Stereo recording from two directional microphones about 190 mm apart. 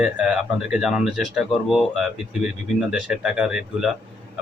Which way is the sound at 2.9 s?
5° right (ahead or behind).